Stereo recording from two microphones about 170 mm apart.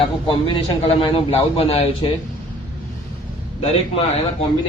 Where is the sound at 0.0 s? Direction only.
30° left (ahead or behind).